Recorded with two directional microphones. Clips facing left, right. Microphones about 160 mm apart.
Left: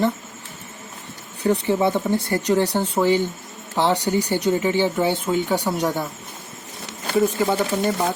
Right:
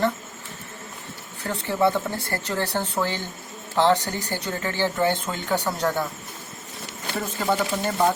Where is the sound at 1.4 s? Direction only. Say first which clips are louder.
Left 4 dB; 20° left (ahead or behind).